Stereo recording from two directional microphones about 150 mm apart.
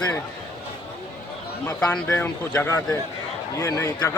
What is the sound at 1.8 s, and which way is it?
A man's voice, 5° left (ahead or behind).